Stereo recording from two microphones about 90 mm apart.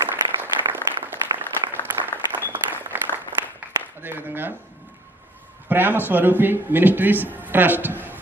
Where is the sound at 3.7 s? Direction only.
20° right (ahead or behind).